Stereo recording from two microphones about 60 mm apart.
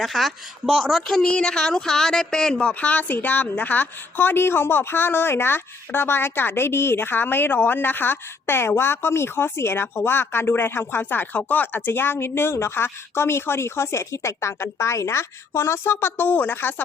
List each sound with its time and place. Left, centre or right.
0.0 s speech: centre
1.2 s a woman's voice: centre; by 16.8 s left